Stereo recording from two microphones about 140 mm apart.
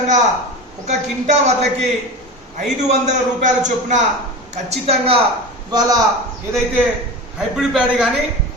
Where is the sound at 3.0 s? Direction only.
60° right (ahead or behind).